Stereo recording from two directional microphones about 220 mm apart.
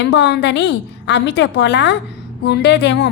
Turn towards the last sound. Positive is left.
turn(degrees=50)  # may be behind; listen again after turning